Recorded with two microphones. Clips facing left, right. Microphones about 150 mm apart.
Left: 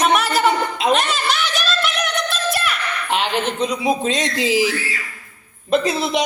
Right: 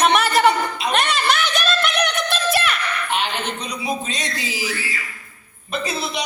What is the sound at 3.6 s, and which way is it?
A woman's voice, 90° left.